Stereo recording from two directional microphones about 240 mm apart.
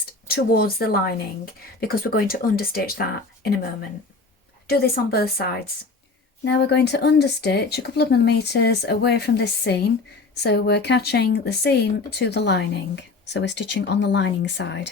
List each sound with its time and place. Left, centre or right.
0.3 s speech: left
4.6 s speech: left